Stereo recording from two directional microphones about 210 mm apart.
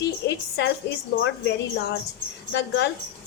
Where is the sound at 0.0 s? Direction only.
55° left (ahead or behind).